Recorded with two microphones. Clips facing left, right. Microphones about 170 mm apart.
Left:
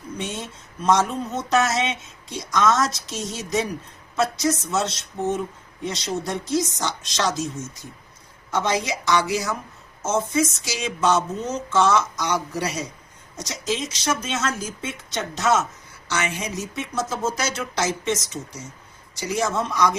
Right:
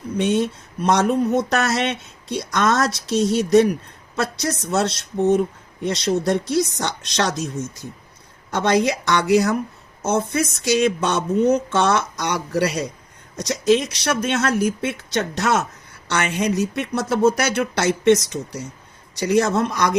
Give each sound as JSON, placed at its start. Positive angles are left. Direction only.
{"t": 0.2, "sound": "speech", "side_deg": -65}